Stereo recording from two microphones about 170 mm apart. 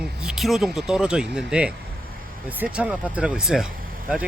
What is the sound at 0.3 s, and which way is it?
Speech, centre (ahead or behind).